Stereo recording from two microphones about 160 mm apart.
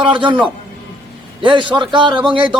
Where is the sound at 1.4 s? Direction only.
30° right (ahead or behind).